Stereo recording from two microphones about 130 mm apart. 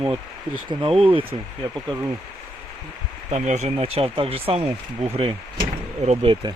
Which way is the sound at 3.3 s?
65° right (ahead or behind).